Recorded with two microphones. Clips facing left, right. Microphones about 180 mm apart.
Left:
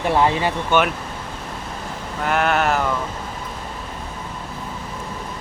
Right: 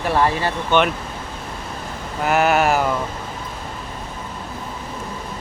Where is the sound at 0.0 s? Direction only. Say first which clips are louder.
Left 1 dB; 20° left (ahead or behind).